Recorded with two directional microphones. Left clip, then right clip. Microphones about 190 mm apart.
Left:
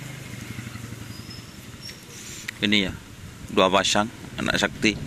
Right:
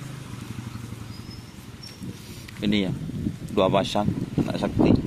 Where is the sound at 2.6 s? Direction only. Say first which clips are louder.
Left 4 dB; 5° right (ahead or behind).